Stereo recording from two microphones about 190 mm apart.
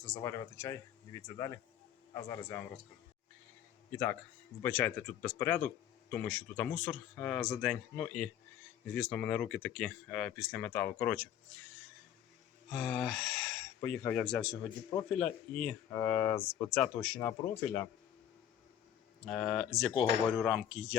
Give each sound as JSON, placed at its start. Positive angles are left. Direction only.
{"t": 0.2, "sound": "speech", "side_deg": 15}
{"t": 4.6, "sound": "speech", "side_deg": 10}
{"t": 12.7, "sound": "speech", "side_deg": 5}
{"t": 19.2, "sound": "speech", "side_deg": 5}